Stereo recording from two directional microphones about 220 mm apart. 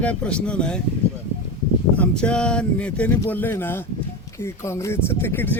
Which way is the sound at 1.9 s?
5° left (ahead or behind).